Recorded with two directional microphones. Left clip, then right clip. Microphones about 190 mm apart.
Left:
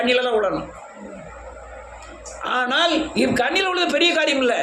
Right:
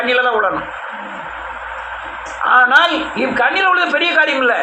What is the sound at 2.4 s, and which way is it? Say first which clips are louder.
A woman's voice: right 10 dB; 45° left (ahead or behind).